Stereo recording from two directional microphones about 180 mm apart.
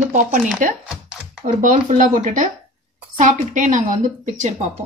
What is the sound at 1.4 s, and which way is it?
Speech, 45° right (ahead or behind).